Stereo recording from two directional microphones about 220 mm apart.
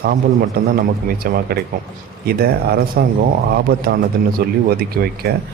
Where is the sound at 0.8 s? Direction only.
40° right (ahead or behind).